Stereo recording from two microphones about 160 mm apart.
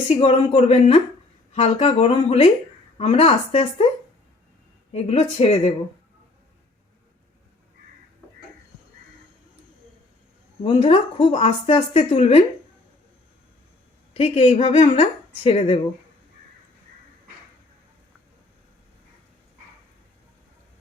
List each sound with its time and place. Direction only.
0.1 s speech: 40° left (ahead or behind)
4.9 s speech: 40° left (ahead or behind)
10.6 s speech: 35° left (ahead or behind)
14.2 s speech: 40° left (ahead or behind)